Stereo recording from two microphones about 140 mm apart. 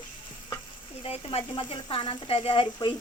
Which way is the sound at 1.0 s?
40° left (ahead or behind).